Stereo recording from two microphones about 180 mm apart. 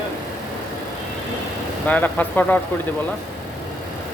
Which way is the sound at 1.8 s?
10° left (ahead or behind).